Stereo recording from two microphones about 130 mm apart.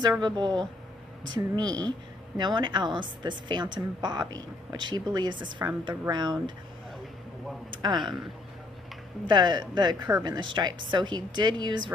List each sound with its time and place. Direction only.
0.2 s a woman's voice: 35° right (ahead or behind)
7.7 s a sound: 35° right (ahead or behind)
9.2 s a woman's voice: 35° right (ahead or behind)